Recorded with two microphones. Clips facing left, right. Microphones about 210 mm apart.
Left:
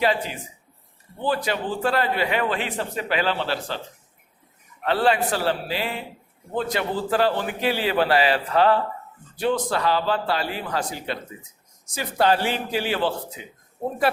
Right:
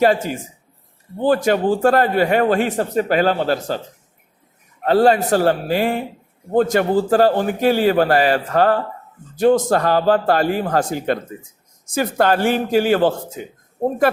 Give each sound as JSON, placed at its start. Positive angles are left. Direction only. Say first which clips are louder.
{"t": 0.0, "sound": "a man's voice", "louder": "right 7 dB", "side_deg": -45}
{"t": 4.8, "sound": "a man's voice", "louder": "right 7 dB", "side_deg": -40}